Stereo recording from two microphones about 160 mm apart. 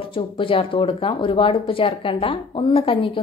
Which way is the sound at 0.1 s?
35° left (ahead or behind).